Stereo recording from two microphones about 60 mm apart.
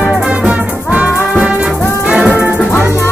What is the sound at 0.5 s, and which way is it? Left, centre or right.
Music, right.